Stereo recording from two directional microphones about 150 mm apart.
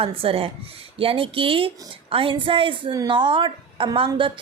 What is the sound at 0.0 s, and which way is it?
A woman's voice, 40° right (ahead or behind).